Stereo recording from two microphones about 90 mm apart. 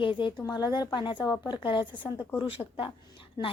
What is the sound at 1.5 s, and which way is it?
Speech, 65° left (ahead or behind).